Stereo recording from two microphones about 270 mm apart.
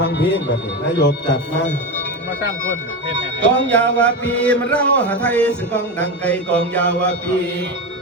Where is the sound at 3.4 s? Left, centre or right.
Centre.